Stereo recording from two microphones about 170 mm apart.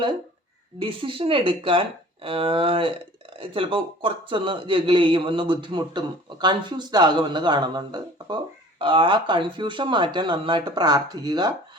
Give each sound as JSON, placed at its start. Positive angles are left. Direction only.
{"t": 0.8, "sound": "speech", "side_deg": -30}